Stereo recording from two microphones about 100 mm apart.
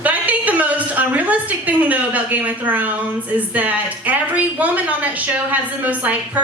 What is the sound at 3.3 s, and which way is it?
Speech, 15° right (ahead or behind).